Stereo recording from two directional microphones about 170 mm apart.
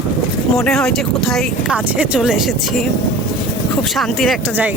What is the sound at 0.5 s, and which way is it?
Speech, 5° left (ahead or behind).